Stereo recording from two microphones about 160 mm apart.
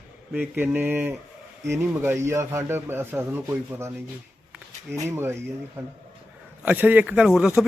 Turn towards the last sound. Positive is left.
turn(degrees=-5)  # may be behind; listen again after turning